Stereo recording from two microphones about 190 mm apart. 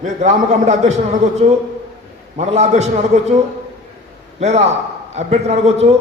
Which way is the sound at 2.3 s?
35° right (ahead or behind).